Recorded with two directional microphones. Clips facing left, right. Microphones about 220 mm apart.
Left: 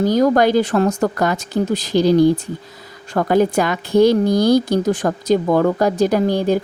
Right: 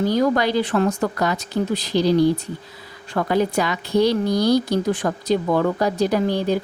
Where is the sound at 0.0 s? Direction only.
45° left (ahead or behind).